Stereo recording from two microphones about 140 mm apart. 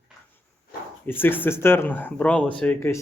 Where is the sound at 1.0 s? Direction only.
15° left (ahead or behind).